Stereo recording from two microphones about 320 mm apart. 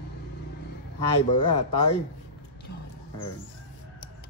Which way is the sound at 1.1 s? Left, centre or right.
Centre.